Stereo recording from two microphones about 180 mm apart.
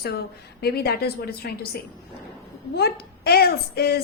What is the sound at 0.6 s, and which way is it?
A woman's voice, 60° left (ahead or behind).